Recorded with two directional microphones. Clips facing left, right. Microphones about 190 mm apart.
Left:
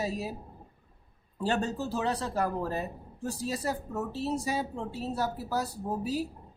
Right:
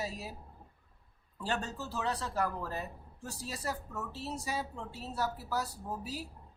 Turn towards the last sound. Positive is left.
turn(degrees=20)  # may be behind; listen again after turning